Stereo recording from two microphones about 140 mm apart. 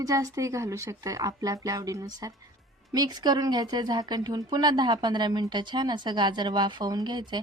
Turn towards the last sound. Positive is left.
turn(degrees=-30)  # may be behind; listen again after turning